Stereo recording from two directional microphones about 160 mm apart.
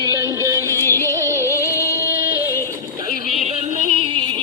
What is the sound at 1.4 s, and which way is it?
Music, 20° left (ahead or behind).